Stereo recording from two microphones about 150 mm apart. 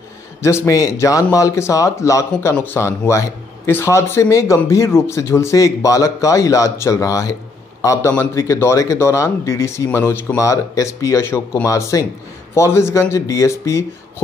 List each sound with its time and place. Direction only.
0.4 s a man's voice: 20° left (ahead or behind)